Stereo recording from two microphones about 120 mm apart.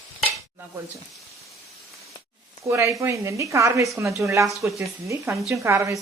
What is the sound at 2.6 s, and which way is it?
Speech, 25° right (ahead or behind).